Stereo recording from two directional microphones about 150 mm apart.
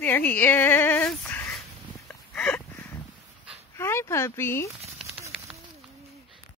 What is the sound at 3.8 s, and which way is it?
Speech, 15° left (ahead or behind).